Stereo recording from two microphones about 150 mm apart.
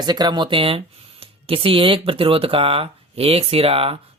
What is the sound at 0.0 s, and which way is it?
Speech, 30° right (ahead or behind).